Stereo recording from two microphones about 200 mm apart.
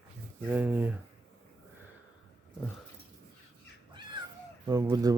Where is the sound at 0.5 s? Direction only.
10° right (ahead or behind).